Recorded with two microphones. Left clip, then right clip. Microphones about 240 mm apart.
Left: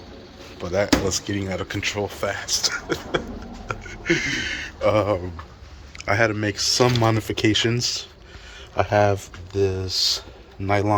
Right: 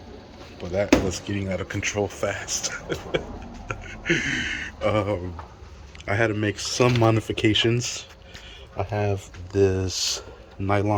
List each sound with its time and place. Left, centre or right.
0.6 s speech: centre
8.7 s speech: left
9.0 s speech: centre
9.5 s speech: right
10.7 s speech: centre